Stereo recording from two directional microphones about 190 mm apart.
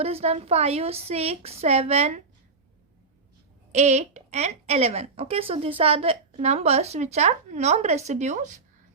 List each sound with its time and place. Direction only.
0.0 s speech: 35° right (ahead or behind)
3.7 s speech: 35° right (ahead or behind)